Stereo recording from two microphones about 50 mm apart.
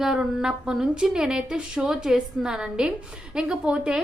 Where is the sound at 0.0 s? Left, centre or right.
Centre.